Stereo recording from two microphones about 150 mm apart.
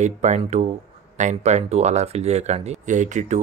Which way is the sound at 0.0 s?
50° right (ahead or behind).